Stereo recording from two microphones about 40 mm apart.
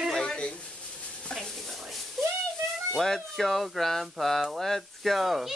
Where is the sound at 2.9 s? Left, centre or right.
Centre.